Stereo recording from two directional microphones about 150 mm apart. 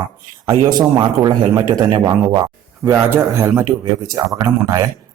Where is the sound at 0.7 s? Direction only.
30° right (ahead or behind).